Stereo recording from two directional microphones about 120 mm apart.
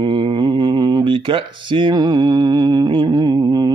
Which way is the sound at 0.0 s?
40° right (ahead or behind).